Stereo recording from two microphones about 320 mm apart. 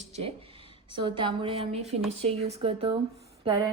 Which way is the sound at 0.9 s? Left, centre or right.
Centre.